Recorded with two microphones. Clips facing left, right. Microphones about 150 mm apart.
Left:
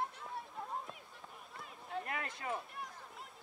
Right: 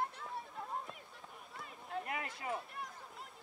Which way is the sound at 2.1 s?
20° right (ahead or behind).